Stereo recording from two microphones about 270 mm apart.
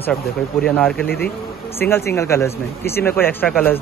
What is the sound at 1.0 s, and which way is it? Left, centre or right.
Speech, left.